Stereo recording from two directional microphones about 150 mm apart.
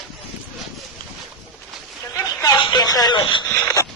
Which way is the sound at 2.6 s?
30° left (ahead or behind).